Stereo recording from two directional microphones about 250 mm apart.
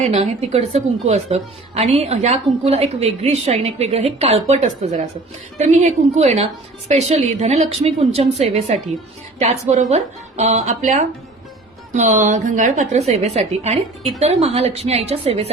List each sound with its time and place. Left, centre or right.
0.0 s a woman's voice: right